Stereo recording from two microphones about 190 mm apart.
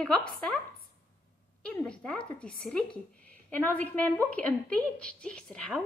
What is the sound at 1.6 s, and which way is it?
A woman's voice, 5° left (ahead or behind).